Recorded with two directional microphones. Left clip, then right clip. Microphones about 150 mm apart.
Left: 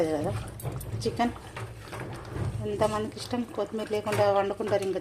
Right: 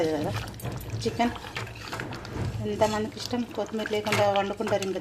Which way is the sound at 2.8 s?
Centre (ahead or behind).